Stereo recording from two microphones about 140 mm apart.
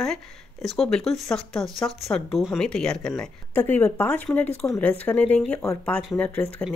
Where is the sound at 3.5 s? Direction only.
15° left (ahead or behind).